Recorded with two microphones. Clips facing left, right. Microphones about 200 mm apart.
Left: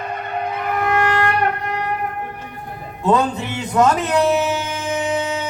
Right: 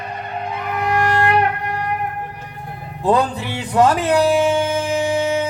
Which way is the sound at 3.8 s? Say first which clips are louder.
Right 1 dB; 30° right (ahead or behind).